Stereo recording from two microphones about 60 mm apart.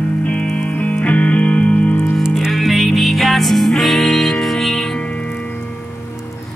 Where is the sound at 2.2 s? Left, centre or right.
Centre.